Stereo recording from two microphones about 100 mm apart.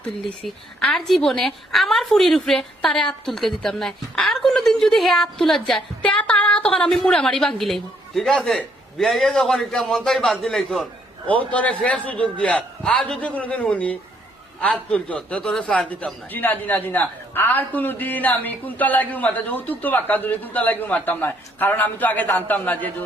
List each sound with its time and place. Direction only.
0.0 s a woman's voice: 5° left (ahead or behind)
11.3 s a man's voice: 15° left (ahead or behind)